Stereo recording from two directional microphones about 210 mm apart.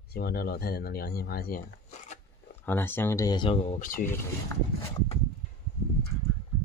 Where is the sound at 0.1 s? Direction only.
50° left (ahead or behind).